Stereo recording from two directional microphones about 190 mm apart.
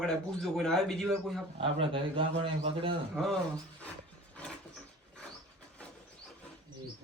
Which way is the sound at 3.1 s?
Centre (ahead or behind).